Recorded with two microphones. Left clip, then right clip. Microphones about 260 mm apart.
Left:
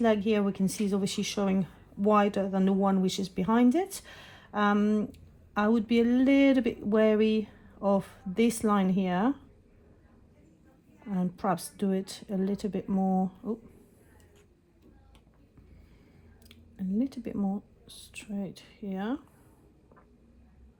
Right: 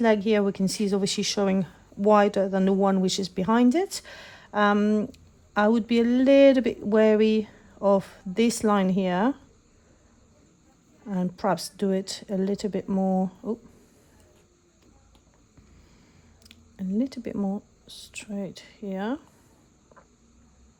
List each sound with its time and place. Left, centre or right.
0.0 s speech: right
11.1 s speech: right
16.4 s speech: right